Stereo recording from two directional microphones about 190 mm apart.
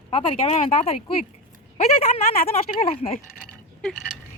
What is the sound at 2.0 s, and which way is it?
Speech, 30° left (ahead or behind).